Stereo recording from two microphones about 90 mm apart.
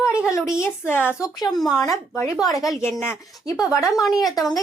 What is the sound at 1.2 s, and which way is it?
Speech, 45° left (ahead or behind).